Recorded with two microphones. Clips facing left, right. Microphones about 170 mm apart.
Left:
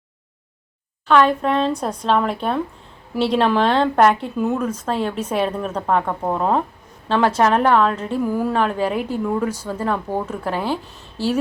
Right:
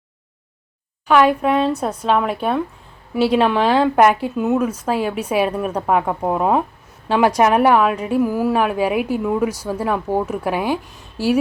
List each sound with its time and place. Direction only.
1.0 s a woman's voice: 10° right (ahead or behind)